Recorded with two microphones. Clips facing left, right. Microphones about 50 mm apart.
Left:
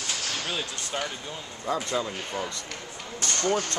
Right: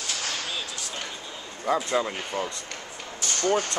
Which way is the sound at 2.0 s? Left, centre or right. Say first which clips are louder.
Right 3 dB; right.